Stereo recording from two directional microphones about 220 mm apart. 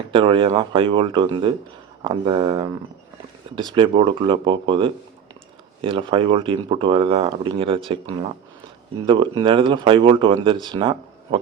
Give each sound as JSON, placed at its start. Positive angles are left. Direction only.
{"t": 0.1, "sound": "speech", "side_deg": -25}